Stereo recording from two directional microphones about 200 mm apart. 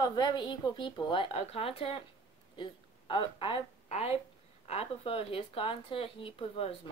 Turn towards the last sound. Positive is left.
turn(degrees=30)  # may be behind; listen again after turning